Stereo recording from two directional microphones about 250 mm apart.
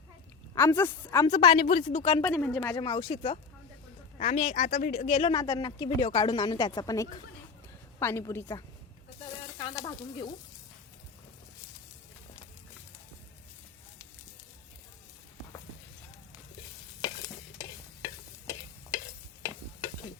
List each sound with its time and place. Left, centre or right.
0.5 s speech: centre
1.3 s speech: left
2.3 s speech: centre; by 5.3 s left
5.3 s speech: centre
9.2 s a sound: left
9.7 s speech: centre
17.0 s stir: centre